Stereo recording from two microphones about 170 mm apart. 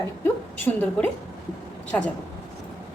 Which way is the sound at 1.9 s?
5° left (ahead or behind).